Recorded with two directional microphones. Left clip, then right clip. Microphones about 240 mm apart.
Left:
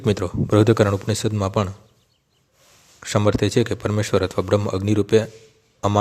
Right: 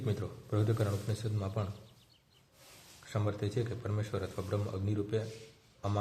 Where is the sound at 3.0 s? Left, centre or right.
Left.